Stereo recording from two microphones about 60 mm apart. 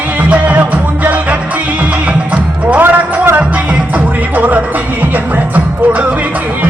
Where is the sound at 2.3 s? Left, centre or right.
Right.